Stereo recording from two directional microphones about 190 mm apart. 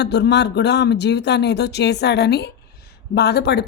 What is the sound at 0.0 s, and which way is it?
A man's voice, 65° left (ahead or behind).